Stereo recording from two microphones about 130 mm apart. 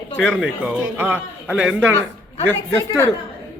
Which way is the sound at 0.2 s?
5° right (ahead or behind).